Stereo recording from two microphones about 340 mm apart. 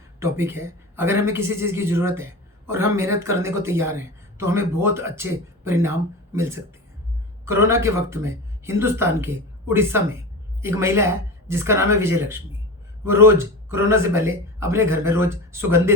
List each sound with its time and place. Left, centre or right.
0.2 s a man's voice: centre
7.4 s a man's voice: centre